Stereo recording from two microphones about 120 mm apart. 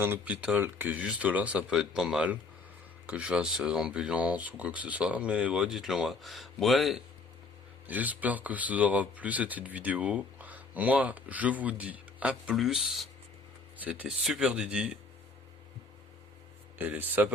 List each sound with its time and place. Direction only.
0.0 s speech: 15° right (ahead or behind)
7.9 s speech: 15° right (ahead or behind)
13.8 s speech: 15° right (ahead or behind)
16.7 s speech: 15° right (ahead or behind)